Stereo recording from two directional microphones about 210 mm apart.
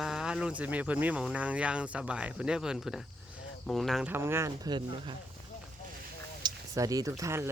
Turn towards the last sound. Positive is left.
turn(degrees=-10)  # may be behind; listen again after turning